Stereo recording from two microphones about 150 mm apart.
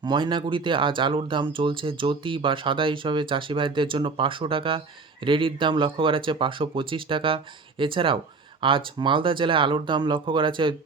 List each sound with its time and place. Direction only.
0.0 s speech: 30° right (ahead or behind)